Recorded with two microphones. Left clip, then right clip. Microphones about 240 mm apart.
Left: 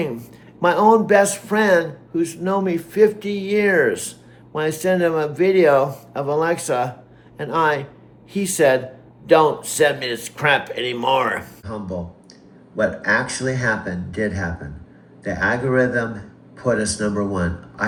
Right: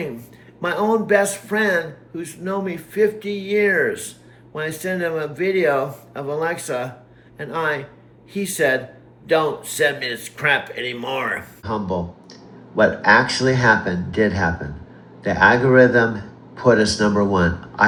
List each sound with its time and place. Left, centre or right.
0.6 s a man's voice: centre
11.6 s speech: right
13.1 s speech: right
13.5 s speech: centre